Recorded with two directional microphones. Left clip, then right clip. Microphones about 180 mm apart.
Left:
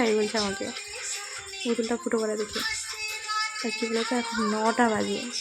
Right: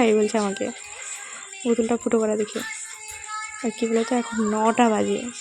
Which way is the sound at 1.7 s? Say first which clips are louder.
Right 6 dB; 30° right (ahead or behind).